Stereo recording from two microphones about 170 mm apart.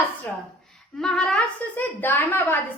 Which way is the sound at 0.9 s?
5° left (ahead or behind).